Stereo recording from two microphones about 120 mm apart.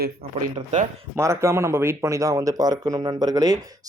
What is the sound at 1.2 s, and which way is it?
Speech, 25° right (ahead or behind).